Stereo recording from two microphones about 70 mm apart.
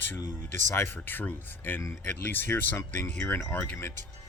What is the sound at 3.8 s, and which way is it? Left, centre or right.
Speech, left.